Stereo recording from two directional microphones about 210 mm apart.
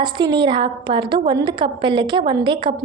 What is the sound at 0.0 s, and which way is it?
A woman's voice, 20° right (ahead or behind).